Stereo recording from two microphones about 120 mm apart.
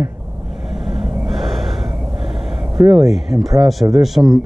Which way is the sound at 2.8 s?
25° right (ahead or behind).